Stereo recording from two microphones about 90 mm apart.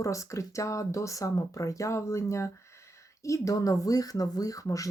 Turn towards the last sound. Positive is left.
turn(degrees=40)  # may be behind; listen again after turning